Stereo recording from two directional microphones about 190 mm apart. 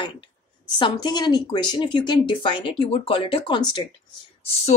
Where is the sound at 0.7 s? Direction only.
25° left (ahead or behind).